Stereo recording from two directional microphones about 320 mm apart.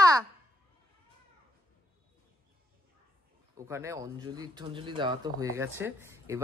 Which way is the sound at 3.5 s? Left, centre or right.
Centre.